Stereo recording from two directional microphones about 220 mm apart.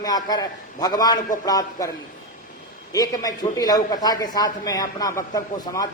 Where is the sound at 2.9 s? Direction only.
15° left (ahead or behind).